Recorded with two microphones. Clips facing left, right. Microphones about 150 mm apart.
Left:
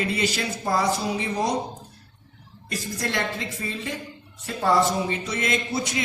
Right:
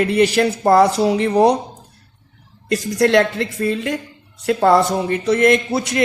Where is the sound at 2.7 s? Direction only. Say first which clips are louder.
Right 14 dB; 75° right (ahead or behind).